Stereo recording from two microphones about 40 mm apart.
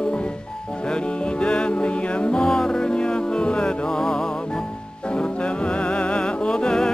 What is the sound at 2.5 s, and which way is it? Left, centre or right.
Music, centre.